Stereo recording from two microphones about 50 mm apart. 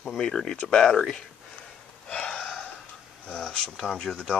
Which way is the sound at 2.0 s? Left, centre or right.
Centre.